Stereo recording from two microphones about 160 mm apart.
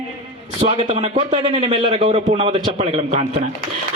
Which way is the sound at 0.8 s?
40° right (ahead or behind).